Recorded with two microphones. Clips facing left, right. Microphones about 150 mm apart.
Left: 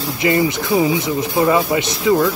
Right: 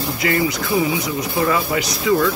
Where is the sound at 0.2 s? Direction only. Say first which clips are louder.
Left 4 dB; 25° left (ahead or behind).